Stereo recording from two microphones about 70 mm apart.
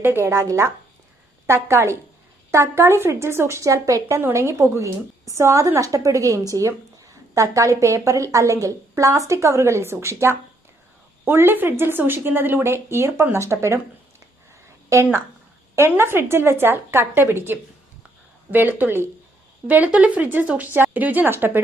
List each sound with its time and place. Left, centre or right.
0.0 s a woman's voice: right
14.9 s a woman's voice: right
15.7 s a woman's voice: right